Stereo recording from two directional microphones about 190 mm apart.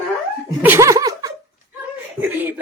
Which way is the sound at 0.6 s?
15° right (ahead or behind).